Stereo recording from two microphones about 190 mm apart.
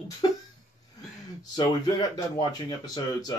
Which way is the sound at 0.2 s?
25° left (ahead or behind).